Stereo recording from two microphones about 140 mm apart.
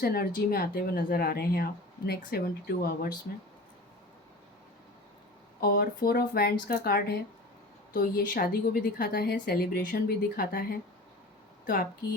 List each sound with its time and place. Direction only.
0.0 s a woman's voice: 90° left
5.5 s a woman's voice: 90° left